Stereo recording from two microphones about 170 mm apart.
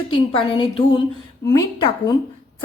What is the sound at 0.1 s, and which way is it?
A woman's voice, 30° left (ahead or behind).